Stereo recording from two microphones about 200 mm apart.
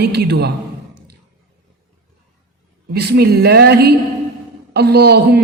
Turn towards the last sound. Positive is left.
turn(degrees=-55)  # may be behind; listen again after turning